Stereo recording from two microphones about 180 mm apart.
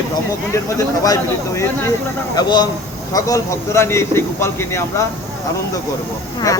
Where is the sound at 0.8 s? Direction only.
20° left (ahead or behind).